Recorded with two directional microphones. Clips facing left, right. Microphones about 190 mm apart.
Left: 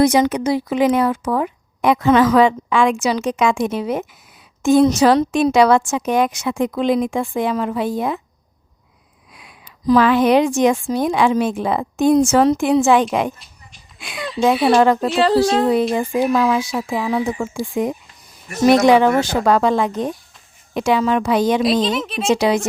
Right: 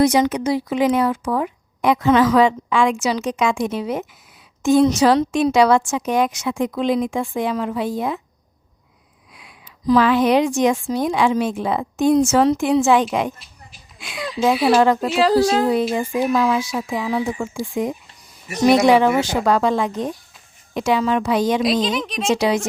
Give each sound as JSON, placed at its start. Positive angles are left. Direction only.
{"t": 0.0, "sound": "speech", "side_deg": 50}
{"t": 9.3, "sound": "a woman's voice", "side_deg": 50}
{"t": 14.2, "sound": "speech", "side_deg": 0}
{"t": 15.7, "sound": "speech", "side_deg": 55}
{"t": 18.4, "sound": "speech", "side_deg": -5}
{"t": 18.9, "sound": "speech", "side_deg": 55}
{"t": 21.6, "sound": "speech", "side_deg": 0}
{"t": 22.4, "sound": "speech", "side_deg": 55}